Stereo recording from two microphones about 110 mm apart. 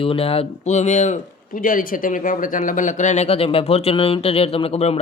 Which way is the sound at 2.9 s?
90° left.